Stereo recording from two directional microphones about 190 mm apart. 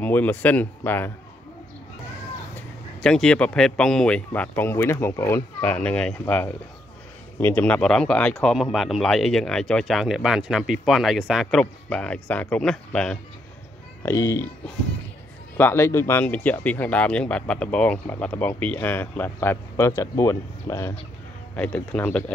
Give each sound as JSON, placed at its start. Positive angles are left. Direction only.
{"t": 0.0, "sound": "speech", "side_deg": 10}
{"t": 2.5, "sound": "speech", "side_deg": 5}
{"t": 14.0, "sound": "speech", "side_deg": 15}
{"t": 15.5, "sound": "speech", "side_deg": 10}